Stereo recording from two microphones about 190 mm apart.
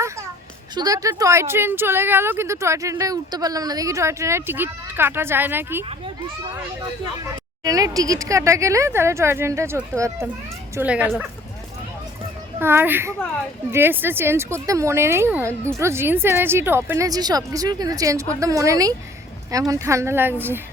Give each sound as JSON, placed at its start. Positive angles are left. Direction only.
{"t": 0.8, "sound": "a woman's voice", "side_deg": -20}
{"t": 7.6, "sound": "a woman's voice", "side_deg": -20}
{"t": 12.5, "sound": "a woman's voice", "side_deg": -10}